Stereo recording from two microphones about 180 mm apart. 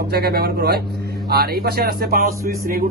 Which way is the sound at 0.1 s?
60° right (ahead or behind).